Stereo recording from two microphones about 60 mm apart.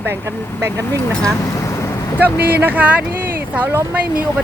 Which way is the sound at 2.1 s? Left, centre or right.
Right.